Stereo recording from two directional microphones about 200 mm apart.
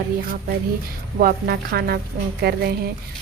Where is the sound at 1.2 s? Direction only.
50° right (ahead or behind).